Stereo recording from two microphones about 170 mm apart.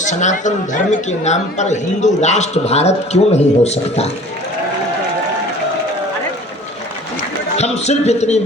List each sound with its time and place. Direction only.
0.0 s a man's voice: 45° left (ahead or behind)
7.5 s speech: 40° left (ahead or behind)